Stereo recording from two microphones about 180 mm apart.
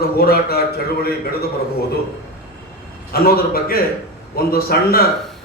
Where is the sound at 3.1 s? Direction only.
55° left (ahead or behind).